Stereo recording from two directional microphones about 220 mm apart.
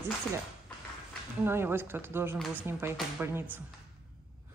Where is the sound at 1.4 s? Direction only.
10° right (ahead or behind).